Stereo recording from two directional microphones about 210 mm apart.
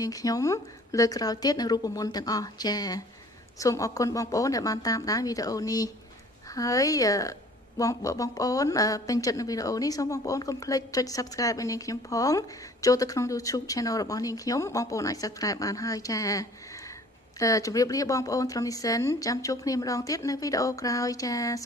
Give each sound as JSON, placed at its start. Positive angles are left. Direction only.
{"t": 0.0, "sound": "a woman's voice", "side_deg": 15}